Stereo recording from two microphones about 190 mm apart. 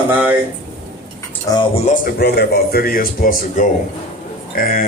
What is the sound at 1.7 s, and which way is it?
A man's voice, 40° left (ahead or behind).